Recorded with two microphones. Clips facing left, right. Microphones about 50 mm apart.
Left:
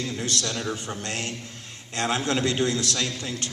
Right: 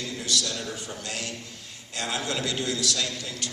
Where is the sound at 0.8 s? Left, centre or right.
Left.